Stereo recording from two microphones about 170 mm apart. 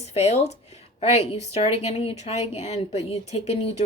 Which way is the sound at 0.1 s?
40° left (ahead or behind).